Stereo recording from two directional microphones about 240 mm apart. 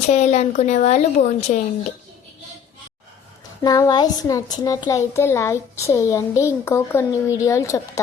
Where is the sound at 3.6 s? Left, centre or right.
Centre.